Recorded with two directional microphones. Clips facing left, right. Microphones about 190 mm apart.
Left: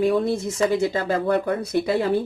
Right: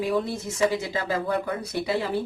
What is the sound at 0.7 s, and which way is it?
Speech, 50° left (ahead or behind).